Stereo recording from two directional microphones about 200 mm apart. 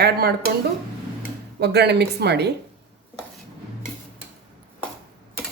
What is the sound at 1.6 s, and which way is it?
Speech, 55° right (ahead or behind).